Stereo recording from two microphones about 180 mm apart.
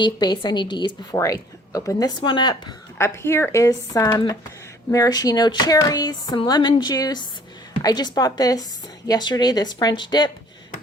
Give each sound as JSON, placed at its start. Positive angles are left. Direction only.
{"t": 0.0, "sound": "a woman's voice", "side_deg": 25}